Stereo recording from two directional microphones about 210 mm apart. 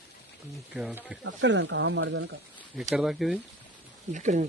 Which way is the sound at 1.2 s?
60° right (ahead or behind).